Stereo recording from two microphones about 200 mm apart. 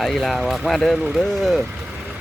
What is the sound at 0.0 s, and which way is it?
Speech, centre (ahead or behind).